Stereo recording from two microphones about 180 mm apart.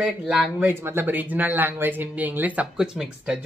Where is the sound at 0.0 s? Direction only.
5° right (ahead or behind).